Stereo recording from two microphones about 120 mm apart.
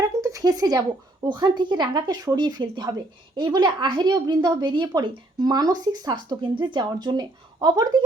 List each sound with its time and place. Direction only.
0.2 s speech: 30° right (ahead or behind)